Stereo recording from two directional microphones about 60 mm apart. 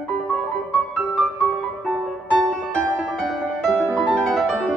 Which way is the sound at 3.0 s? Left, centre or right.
Centre.